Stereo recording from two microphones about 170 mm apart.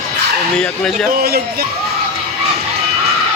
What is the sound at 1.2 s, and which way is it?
Speech, 65° right (ahead or behind).